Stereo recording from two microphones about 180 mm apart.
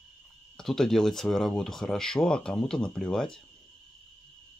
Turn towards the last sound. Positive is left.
turn(degrees=5)  # may be behind; listen again after turning